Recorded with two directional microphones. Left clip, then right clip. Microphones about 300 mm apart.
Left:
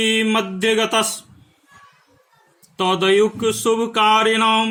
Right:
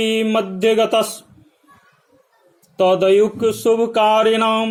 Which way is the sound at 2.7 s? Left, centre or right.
Centre.